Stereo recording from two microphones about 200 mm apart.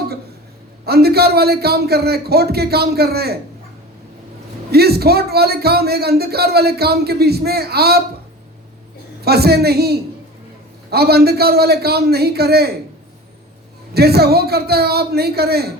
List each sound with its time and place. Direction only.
0.9 s a man's voice: 50° right (ahead or behind)
4.7 s a man's voice: 50° right (ahead or behind)
9.2 s a man's voice: 50° right (ahead or behind)
13.9 s a man's voice: 50° right (ahead or behind)